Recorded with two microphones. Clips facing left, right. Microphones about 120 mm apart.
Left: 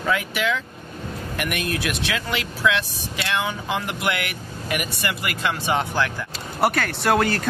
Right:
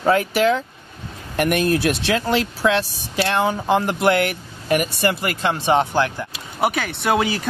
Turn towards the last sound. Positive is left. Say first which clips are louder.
# even
turn(degrees=-5)  # may be behind; listen again after turning